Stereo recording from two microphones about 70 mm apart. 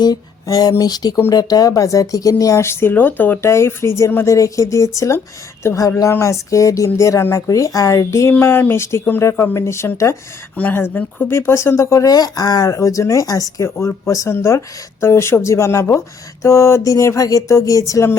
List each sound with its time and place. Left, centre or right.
0.4 s speech: left
0.8 s speech: left
3.4 s speech: left
8.3 s speech: left
10.6 s speech: left
12.1 s speech: left
13.6 s speech: left
16.8 s speech: left